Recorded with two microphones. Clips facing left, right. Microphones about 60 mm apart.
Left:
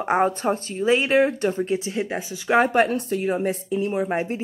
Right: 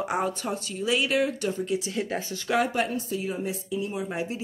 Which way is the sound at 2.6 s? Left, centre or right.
Left.